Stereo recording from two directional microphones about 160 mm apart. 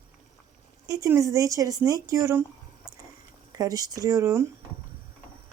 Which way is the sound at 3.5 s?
20° right (ahead or behind).